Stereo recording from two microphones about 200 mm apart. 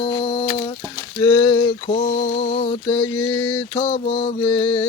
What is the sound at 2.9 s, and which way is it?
Mantra, 10° left (ahead or behind).